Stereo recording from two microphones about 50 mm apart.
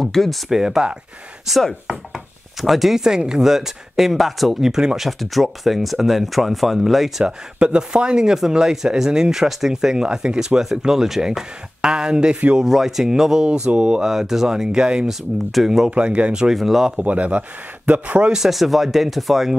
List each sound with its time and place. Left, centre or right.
0.0 s speech: centre
0.5 s speech: centre
1.6 s speech: centre
2.1 s chopping: centre
3.2 s speech: centre
7.2 s speech: centre
13.5 s speech: right
14.1 s speech: centre
15.9 s speech: right
16.4 s speech: centre
16.9 s speech: right
18.3 s speech: centre